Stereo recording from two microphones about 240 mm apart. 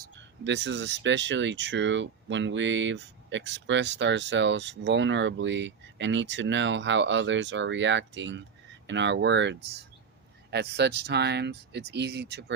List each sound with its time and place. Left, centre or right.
0.2 s speech: right